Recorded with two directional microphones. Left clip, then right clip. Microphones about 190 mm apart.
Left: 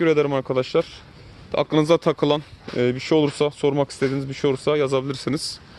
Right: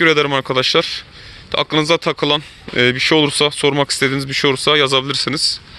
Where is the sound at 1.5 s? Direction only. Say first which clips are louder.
Right 3 dB; 10° left (ahead or behind).